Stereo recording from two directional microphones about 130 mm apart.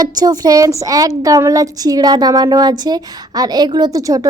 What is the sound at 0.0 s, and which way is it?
A woman's voice, 30° right (ahead or behind).